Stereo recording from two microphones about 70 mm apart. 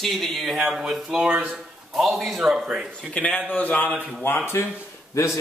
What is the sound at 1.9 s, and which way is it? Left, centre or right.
Speech, centre.